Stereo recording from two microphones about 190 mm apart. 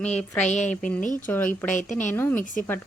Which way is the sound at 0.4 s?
40° left (ahead or behind).